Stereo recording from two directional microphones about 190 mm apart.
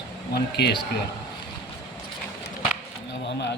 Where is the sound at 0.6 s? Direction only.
60° left (ahead or behind).